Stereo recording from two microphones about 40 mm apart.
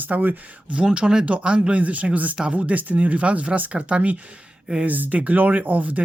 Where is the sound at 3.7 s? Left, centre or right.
Right.